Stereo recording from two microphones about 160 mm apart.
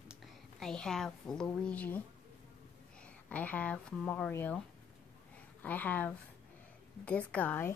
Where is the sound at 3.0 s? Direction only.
10° left (ahead or behind).